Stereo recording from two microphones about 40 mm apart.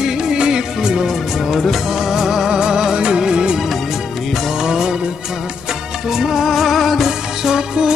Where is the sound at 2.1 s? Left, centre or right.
Centre.